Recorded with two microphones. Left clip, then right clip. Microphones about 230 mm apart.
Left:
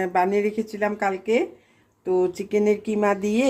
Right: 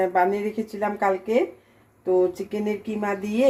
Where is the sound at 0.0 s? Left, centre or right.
Left.